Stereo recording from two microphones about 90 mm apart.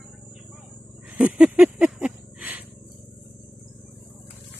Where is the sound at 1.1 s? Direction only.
15° right (ahead or behind).